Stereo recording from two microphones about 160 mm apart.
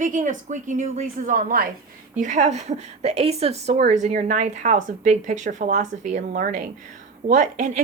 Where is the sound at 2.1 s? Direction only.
50° right (ahead or behind).